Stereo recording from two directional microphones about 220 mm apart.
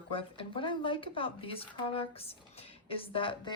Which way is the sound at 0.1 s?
25° left (ahead or behind).